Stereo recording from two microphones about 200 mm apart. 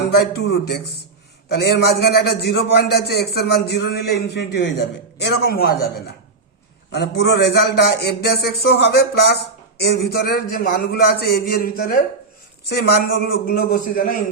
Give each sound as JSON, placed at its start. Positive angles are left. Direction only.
{"t": 0.0, "sound": "a man's voice", "side_deg": 50}
{"t": 6.9, "sound": "a man's voice", "side_deg": 55}